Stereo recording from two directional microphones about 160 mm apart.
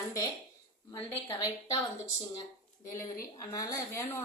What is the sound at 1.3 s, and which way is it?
Speech, 25° left (ahead or behind).